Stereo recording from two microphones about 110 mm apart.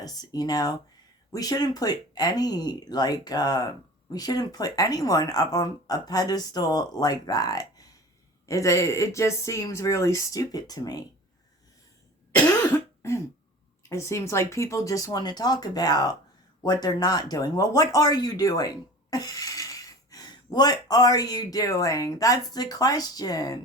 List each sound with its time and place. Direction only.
0.0 s speech: 35° left (ahead or behind)
13.0 s cough: 25° left (ahead or behind)
13.8 s speech: 25° left (ahead or behind)